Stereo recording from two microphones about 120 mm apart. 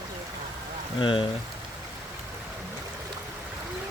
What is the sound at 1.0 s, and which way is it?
Speech, 45° left (ahead or behind).